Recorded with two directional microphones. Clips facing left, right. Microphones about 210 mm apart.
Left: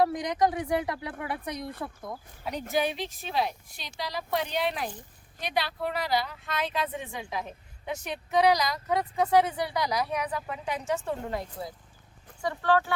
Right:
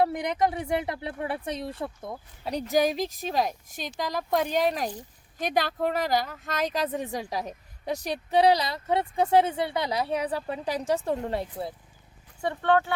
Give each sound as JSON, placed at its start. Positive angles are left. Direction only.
{"t": 0.0, "sound": "a woman's voice", "side_deg": -25}